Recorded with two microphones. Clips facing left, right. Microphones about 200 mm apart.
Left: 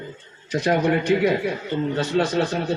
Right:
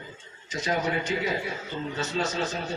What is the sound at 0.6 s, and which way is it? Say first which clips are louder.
A man's voice: left 8 dB; 65° left (ahead or behind).